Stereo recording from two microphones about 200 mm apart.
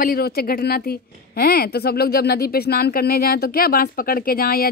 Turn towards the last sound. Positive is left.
turn(degrees=45)  # may be behind; listen again after turning